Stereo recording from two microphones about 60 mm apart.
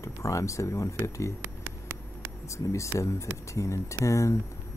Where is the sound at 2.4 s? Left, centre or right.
Left.